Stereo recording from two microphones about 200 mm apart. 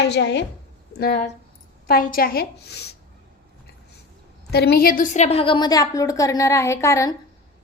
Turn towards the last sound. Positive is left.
turn(degrees=15)  # may be behind; listen again after turning